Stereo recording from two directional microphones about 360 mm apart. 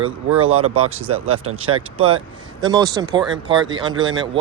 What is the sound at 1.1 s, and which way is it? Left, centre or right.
Speech, right.